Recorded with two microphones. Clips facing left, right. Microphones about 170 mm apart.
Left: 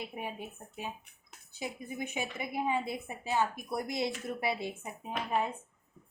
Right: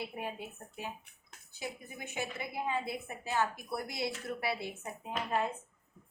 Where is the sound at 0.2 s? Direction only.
20° left (ahead or behind).